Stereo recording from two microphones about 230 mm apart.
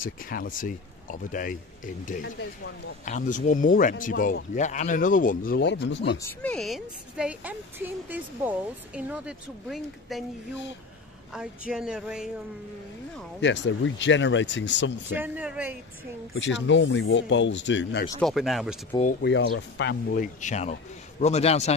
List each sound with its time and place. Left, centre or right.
0.0 s speech: left
3.1 s speech: left
6.1 s a woman's voice: centre
11.3 s a woman's voice: centre
13.4 s speech: left
15.1 s speech: centre
16.3 s speech: left
18.2 s a woman's voice: centre
18.9 s a man's voice: left
19.2 s speech: left
20.3 s a man's voice: left